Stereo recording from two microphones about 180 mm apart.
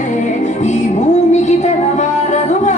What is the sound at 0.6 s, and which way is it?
Music, 40° left (ahead or behind).